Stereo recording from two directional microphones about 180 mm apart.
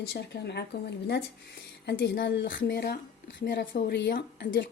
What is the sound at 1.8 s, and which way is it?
Speech, 65° left (ahead or behind).